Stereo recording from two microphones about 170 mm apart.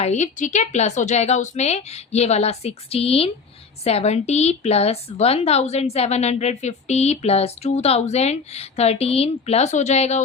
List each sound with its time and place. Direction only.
0.0 s a woman's voice: 45° left (ahead or behind)